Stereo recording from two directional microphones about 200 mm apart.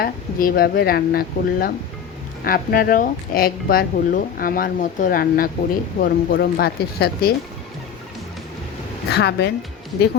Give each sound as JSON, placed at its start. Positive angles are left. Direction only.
{"t": 0.0, "sound": "speech", "side_deg": 45}
{"t": 9.1, "sound": "a woman's voice", "side_deg": 60}